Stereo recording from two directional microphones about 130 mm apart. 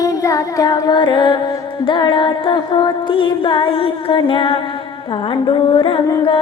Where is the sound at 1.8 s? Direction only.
40° left (ahead or behind).